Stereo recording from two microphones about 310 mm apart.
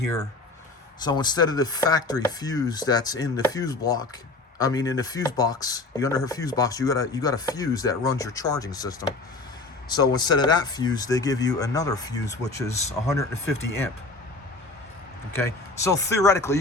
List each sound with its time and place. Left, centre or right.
1.0 s speech: centre
15.4 s speech: centre